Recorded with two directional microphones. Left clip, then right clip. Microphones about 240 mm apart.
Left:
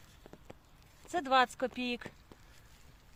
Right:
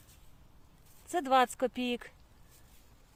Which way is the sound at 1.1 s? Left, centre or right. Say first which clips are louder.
Right 1 dB; right.